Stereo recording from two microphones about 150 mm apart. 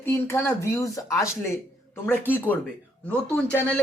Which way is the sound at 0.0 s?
15° left (ahead or behind).